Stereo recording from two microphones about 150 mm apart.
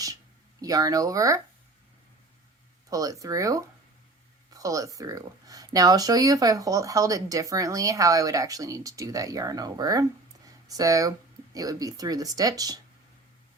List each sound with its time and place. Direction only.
0.6 s speech: 25° right (ahead or behind)
2.9 s speech: 25° right (ahead or behind)